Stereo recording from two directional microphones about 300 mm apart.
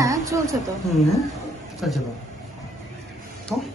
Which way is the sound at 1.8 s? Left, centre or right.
Centre.